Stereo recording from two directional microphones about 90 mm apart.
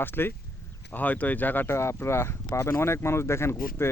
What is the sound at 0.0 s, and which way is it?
Speech, 25° left (ahead or behind).